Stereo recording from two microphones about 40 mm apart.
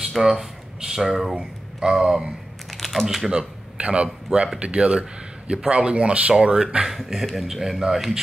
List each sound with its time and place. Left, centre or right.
0.2 s speech: centre
2.8 s typing: centre
3.3 s a sound: right
3.8 s a man's voice: right
6.3 s a man's voice: right
6.9 s a man's voice: centre